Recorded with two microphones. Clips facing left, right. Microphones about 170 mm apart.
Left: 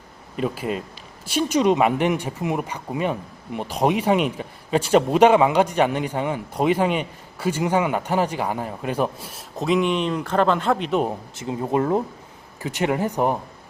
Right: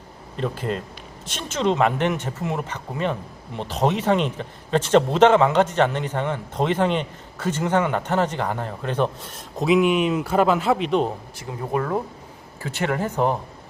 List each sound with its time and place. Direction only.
0.3 s speech: 10° left (ahead or behind)
9.6 s speech: 5° right (ahead or behind)
11.3 s speech: 20° left (ahead or behind)